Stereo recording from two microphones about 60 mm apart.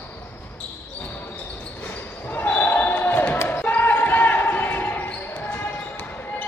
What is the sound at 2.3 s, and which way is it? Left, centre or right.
Basketball bounce, left.